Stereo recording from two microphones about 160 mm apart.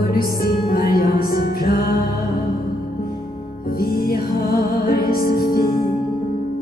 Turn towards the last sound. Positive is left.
turn(degrees=65)  # may be behind; listen again after turning